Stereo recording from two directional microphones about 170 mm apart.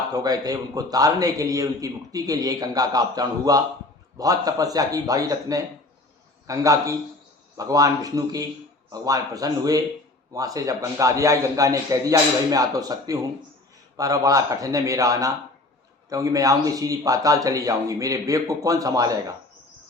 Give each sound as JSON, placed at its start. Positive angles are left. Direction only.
{"t": 0.1, "sound": "a man's voice", "side_deg": -20}